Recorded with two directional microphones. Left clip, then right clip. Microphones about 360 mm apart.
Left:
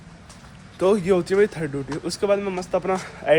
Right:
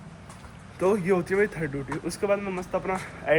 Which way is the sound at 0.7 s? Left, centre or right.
Centre.